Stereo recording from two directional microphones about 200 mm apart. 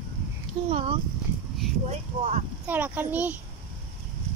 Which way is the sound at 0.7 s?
30° right (ahead or behind).